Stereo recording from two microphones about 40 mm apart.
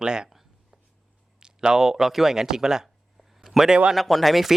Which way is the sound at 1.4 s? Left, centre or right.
Centre.